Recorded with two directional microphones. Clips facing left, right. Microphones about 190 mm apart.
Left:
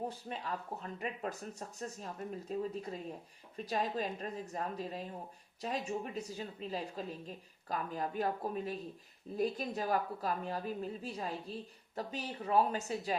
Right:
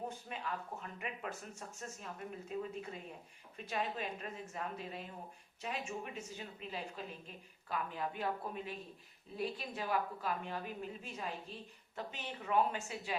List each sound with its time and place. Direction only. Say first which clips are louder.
0.1 s a woman's voice: left 2 dB; 35° left (ahead or behind)